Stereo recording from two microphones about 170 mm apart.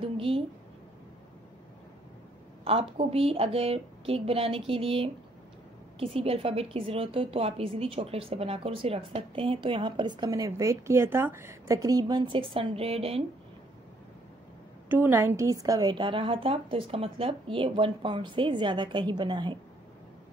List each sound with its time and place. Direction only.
0.0 s a sound: 35° right (ahead or behind)
2.6 s a woman's voice: 35° right (ahead or behind)
14.9 s a woman's voice: 10° right (ahead or behind); by 19.6 s 25° right (ahead or behind)